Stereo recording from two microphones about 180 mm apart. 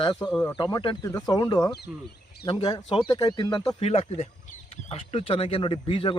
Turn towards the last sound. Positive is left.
turn(degrees=30)  # may be behind; listen again after turning